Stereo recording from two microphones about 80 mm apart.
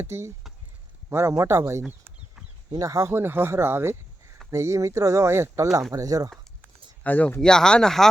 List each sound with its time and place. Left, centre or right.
0.0 s speech: right
2.6 s speech: right
3.1 s speech: right
5.9 s speech: right
7.0 s speech: centre